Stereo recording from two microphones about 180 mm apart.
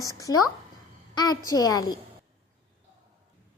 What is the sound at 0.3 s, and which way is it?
A woman's voice, 20° left (ahead or behind).